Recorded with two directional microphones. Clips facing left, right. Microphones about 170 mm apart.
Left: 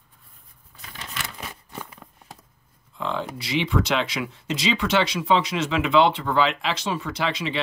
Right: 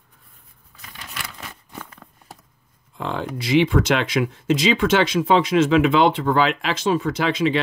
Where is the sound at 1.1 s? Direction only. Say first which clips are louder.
Left 1 dB; 25° left (ahead or behind).